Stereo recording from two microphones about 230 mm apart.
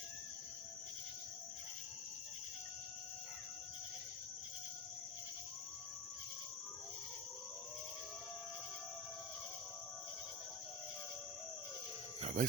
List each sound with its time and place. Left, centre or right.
12.2 s cricket: right